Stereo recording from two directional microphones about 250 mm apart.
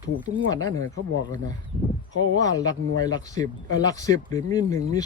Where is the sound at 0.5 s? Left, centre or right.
Centre.